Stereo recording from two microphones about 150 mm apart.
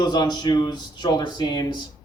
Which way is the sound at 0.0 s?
30° left (ahead or behind).